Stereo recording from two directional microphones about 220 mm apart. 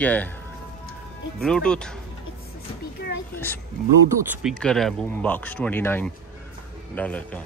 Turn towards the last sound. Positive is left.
turn(degrees=5)  # may be behind; listen again after turning